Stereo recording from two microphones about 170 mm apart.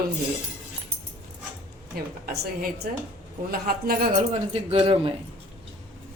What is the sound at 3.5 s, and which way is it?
Speech, 60° right (ahead or behind).